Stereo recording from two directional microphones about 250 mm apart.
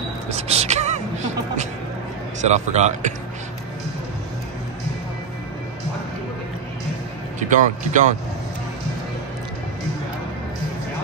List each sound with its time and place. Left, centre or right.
0.3 s music: right
2.4 s speech: right
7.3 s speech: right